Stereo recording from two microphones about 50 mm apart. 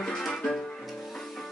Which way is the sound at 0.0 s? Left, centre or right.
Centre.